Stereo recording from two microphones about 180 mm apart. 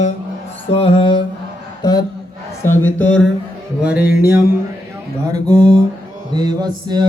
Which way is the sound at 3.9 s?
60° left (ahead or behind).